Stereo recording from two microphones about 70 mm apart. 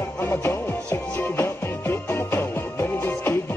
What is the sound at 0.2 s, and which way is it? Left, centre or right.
Music, left.